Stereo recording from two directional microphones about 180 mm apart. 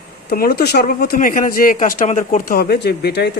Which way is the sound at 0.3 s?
60° left (ahead or behind).